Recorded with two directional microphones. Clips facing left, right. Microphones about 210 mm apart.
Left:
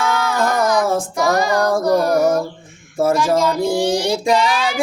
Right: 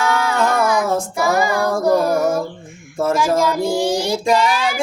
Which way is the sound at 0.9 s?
10° right (ahead or behind).